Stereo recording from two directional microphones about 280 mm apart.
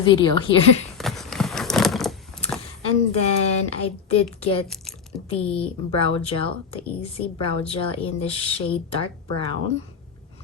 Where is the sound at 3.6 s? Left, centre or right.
Left.